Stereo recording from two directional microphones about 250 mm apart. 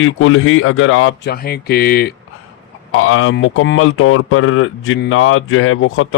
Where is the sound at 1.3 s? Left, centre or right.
Left.